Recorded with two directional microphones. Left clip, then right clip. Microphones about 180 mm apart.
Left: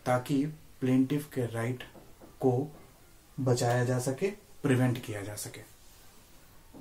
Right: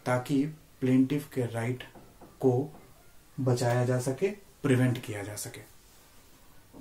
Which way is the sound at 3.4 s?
Centre (ahead or behind).